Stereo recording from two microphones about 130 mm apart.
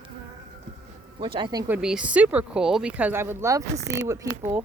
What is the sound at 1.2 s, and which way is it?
Speech, 40° right (ahead or behind).